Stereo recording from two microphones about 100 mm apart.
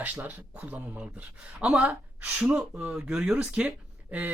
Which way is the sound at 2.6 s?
Centre (ahead or behind).